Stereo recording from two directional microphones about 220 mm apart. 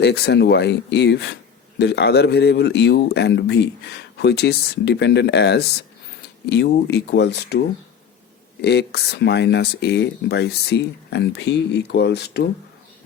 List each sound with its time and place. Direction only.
0.0 s a man's voice: 50° left (ahead or behind)
8.6 s a man's voice: 50° left (ahead or behind)